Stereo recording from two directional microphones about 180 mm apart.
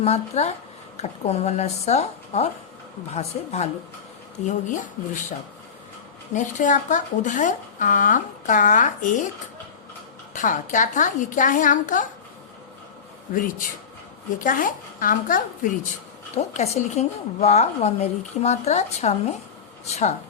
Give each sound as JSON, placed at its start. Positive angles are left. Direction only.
{"t": 0.0, "sound": "a woman's voice", "side_deg": 35}
{"t": 6.3, "sound": "speech", "side_deg": 45}
{"t": 10.3, "sound": "speech", "side_deg": 45}
{"t": 13.3, "sound": "speech", "side_deg": 50}
{"t": 16.4, "sound": "a woman's voice", "side_deg": 40}